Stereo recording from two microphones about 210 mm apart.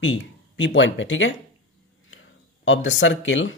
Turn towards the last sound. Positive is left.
turn(degrees=65)  # may be behind; listen again after turning